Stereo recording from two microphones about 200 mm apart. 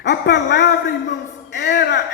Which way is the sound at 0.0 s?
60° left (ahead or behind).